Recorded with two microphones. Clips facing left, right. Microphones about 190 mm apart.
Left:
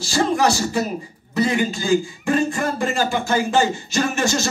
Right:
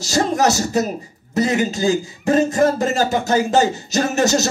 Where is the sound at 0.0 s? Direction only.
40° right (ahead or behind).